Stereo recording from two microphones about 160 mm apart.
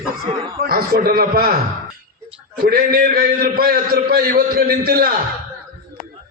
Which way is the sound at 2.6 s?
70° right (ahead or behind).